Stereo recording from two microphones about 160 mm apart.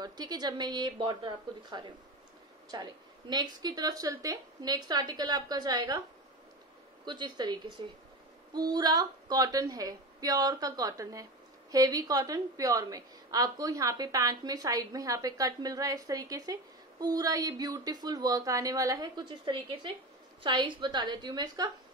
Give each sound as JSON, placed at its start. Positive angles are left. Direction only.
{"t": 0.0, "sound": "a woman's voice", "side_deg": -25}
{"t": 7.1, "sound": "a woman's voice", "side_deg": -25}